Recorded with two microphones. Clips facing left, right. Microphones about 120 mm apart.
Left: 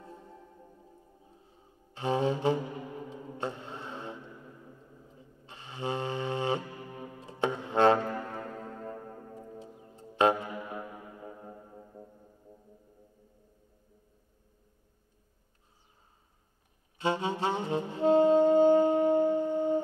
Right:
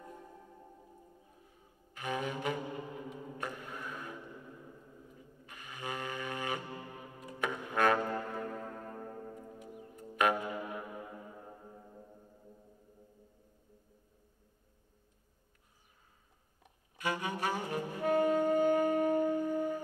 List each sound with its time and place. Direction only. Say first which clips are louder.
1.2 s flute: left 3 dB; 25° left (ahead or behind)
3.1 s a sound: left 5 dB; 25° left (ahead or behind)
5.0 s music: left 1 dB; 25° left (ahead or behind)
9.3 s music: left 2 dB; 25° left (ahead or behind)
17.0 s saxophone: left 5 dB; 25° left (ahead or behind)